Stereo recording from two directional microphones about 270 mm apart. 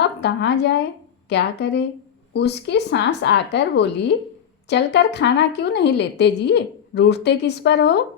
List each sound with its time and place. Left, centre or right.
0.0 s a woman's voice: left